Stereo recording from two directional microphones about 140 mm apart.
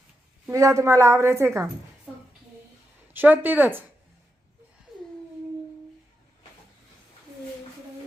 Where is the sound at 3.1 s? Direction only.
15° right (ahead or behind).